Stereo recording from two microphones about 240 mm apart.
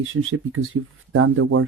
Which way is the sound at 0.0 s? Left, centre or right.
Right.